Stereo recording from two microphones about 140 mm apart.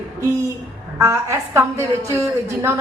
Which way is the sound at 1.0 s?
20° right (ahead or behind).